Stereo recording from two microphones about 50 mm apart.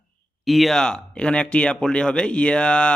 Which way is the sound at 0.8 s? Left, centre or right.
Centre.